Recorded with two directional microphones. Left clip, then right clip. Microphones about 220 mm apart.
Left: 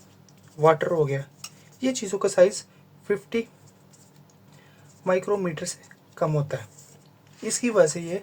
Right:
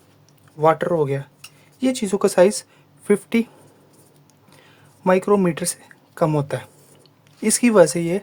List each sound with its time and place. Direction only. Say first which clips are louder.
0.6 s speech: right 3 dB; 25° right (ahead or behind)
5.0 s speech: right 7 dB; 35° right (ahead or behind)